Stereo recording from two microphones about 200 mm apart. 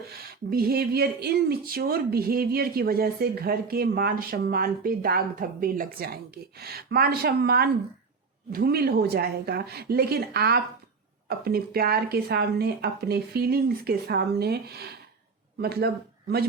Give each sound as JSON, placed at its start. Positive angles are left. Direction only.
{"t": 0.5, "sound": "speech", "side_deg": -50}